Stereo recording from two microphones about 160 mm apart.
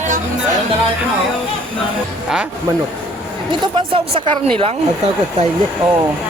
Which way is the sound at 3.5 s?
30° right (ahead or behind).